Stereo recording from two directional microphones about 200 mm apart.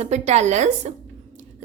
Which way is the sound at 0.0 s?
35° right (ahead or behind).